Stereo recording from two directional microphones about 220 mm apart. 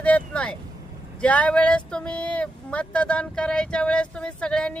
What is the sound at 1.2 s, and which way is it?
Speech, 5° left (ahead or behind).